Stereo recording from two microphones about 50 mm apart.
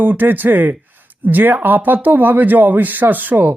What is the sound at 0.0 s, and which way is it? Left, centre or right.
Speech, right.